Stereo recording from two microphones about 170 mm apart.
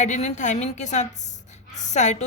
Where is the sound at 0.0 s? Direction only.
45° left (ahead or behind).